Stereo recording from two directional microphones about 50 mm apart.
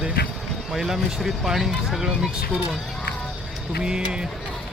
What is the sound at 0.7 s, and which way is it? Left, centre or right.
Speech, centre.